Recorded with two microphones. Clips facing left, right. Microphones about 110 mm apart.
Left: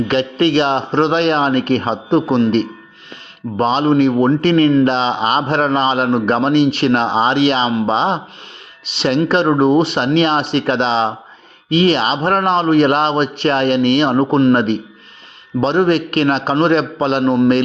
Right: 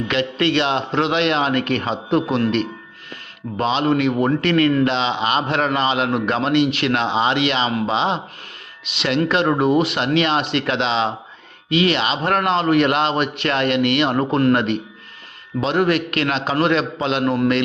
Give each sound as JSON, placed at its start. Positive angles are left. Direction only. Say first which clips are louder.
{"t": 0.1, "sound": "a man's voice", "louder": "left 3 dB", "side_deg": 35}